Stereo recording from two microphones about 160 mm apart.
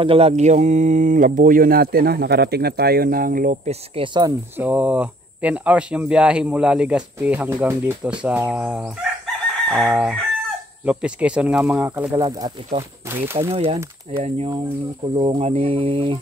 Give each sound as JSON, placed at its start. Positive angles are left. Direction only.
{"t": 0.0, "sound": "speech", "side_deg": -35}
{"t": 3.9, "sound": "speech", "side_deg": -30}
{"t": 4.6, "sound": "speech", "side_deg": -10}
{"t": 9.7, "sound": "chicken", "side_deg": 0}
{"t": 10.9, "sound": "speech", "side_deg": -10}
{"t": 12.2, "sound": "speech", "side_deg": -25}
{"t": 13.1, "sound": "speech", "side_deg": -15}
{"t": 13.5, "sound": "speech", "side_deg": -35}